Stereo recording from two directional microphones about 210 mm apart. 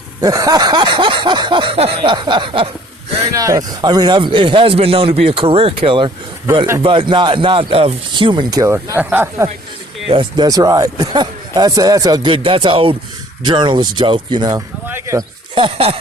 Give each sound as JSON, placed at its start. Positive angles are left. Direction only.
{"t": 0.2, "sound": "a man's voice", "side_deg": -15}
{"t": 10.1, "sound": "a man's voice", "side_deg": -20}